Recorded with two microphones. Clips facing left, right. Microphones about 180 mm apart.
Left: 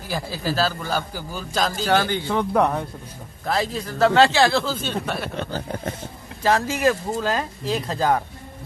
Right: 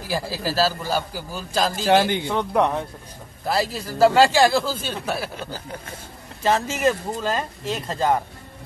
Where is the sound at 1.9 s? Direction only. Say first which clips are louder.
Right 4 dB; 20° right (ahead or behind).